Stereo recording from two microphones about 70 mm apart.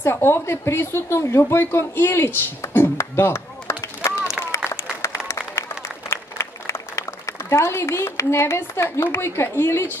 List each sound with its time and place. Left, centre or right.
0.0 s a woman's voice: left
4.6 s applause: left